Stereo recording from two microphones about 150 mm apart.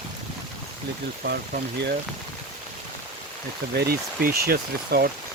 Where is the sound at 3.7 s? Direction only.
90° right.